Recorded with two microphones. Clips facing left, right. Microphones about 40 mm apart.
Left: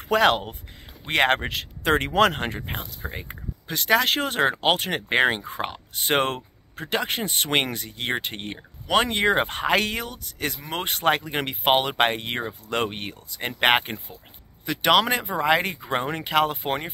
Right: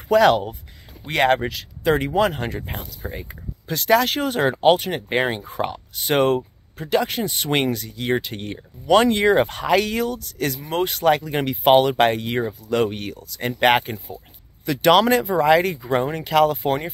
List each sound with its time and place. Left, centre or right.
0.1 s speech: left
3.1 s speech: left
4.1 s speech: left
8.9 s speech: left
9.9 s speech: left
10.6 s speech: left